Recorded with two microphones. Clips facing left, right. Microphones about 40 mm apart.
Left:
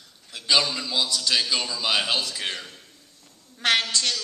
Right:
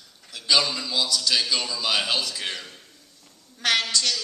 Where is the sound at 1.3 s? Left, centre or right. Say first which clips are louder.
Even; centre.